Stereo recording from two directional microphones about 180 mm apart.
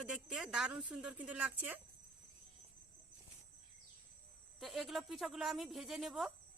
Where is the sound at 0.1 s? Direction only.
5° right (ahead or behind).